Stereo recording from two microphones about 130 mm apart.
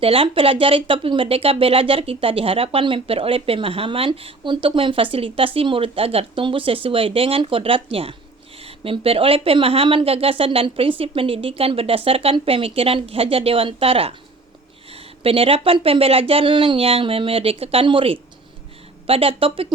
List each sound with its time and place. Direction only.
0.0 s speech: 45° right (ahead or behind)